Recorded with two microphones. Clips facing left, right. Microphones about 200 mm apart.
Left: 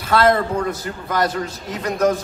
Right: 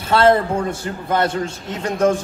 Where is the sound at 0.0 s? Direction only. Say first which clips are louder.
Right 2 dB; 30° right (ahead or behind).